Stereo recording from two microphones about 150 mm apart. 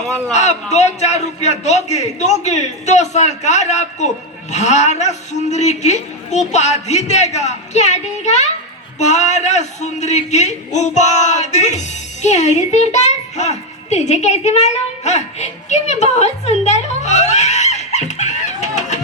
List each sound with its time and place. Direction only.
0.3 s a man's voice: 50° left (ahead or behind)